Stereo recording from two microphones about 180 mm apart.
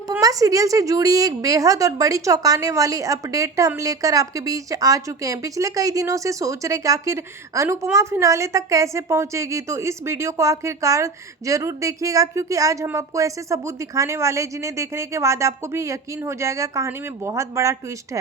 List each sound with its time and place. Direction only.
0.1 s a woman's voice: 20° right (ahead or behind)